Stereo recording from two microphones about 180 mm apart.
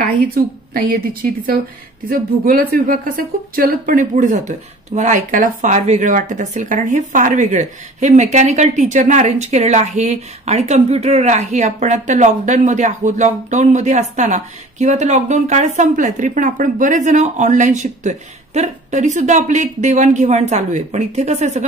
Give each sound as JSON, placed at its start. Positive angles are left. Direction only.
{"t": 0.0, "sound": "a woman's voice", "side_deg": -50}
{"t": 2.0, "sound": "a woman's voice", "side_deg": -55}